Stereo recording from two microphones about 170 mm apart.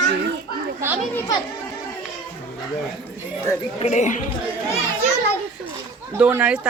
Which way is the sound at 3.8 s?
45° left (ahead or behind).